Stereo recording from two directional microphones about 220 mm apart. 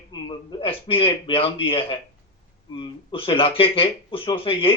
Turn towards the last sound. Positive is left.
turn(degrees=25)  # may be behind; listen again after turning